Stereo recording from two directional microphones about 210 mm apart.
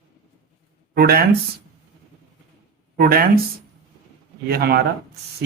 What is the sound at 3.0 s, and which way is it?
Speech, 45° right (ahead or behind).